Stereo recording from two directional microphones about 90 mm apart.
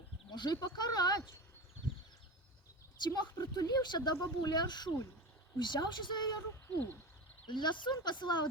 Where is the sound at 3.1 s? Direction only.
50° left (ahead or behind).